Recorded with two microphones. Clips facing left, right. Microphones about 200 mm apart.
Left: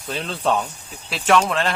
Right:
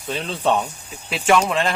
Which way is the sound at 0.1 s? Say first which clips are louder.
Right 1 dB; centre (ahead or behind).